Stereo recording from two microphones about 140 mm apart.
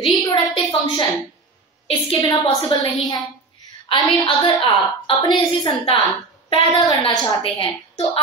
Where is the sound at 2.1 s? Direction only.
30° left (ahead or behind).